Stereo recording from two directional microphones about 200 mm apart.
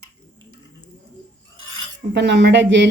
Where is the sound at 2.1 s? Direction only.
60° right (ahead or behind).